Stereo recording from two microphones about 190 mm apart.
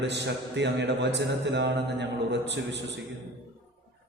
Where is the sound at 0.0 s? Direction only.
65° right (ahead or behind).